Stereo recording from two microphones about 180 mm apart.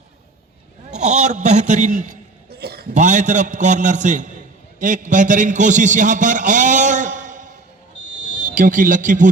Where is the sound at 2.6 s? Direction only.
60° right (ahead or behind).